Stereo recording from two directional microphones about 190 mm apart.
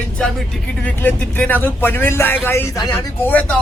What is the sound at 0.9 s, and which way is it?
Speech, 10° left (ahead or behind).